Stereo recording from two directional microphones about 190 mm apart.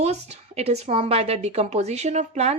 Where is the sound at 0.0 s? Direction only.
35° right (ahead or behind).